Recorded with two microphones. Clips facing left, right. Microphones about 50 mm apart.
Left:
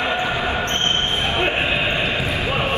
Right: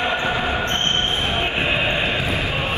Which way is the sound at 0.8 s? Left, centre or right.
Left.